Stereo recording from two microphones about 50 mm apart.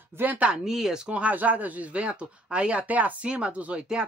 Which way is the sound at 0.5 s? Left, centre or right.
Centre.